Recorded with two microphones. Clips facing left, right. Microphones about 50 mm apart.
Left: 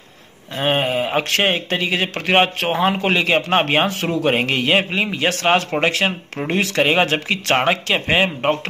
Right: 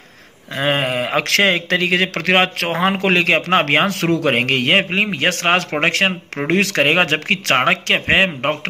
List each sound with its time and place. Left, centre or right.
0.6 s a man's voice: right